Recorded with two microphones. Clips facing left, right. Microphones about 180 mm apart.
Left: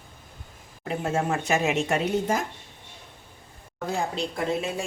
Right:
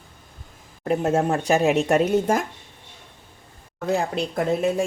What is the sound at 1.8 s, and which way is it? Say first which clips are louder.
Speech: right 6 dB; 50° right (ahead or behind).